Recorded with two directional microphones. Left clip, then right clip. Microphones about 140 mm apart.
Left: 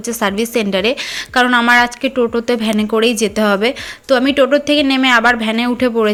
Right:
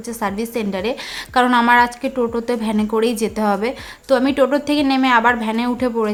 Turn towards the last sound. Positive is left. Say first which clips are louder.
# left 5 dB
turn(degrees=15)  # may be behind; listen again after turning